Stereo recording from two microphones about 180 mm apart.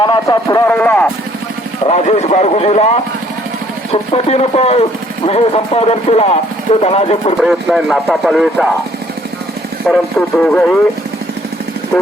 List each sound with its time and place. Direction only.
0.0 s speech: 20° left (ahead or behind)
0.7 s speech: 10° left (ahead or behind)
1.9 s speech: 40° left (ahead or behind)
4.1 s speech: 35° left (ahead or behind)
7.4 s speech: centre (ahead or behind)
9.8 s speech: 5° left (ahead or behind)